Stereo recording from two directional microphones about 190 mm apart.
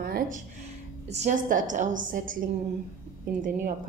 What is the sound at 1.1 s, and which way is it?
A woman's voice, 40° right (ahead or behind).